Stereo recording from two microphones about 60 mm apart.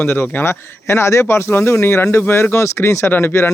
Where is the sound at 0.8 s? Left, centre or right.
Left.